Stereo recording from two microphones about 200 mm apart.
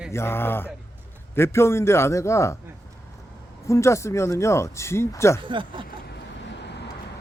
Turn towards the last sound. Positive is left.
turn(degrees=-25)  # may be behind; listen again after turning